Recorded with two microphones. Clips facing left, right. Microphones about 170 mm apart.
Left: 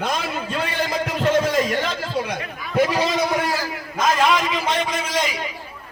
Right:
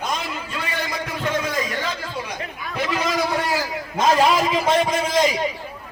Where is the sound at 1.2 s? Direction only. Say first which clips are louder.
Left 6 dB; 25° left (ahead or behind).